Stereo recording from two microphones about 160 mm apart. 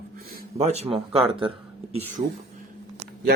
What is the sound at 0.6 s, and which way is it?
Speech, 40° right (ahead or behind).